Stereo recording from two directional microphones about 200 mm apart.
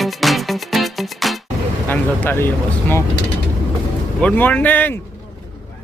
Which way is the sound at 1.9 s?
10° left (ahead or behind).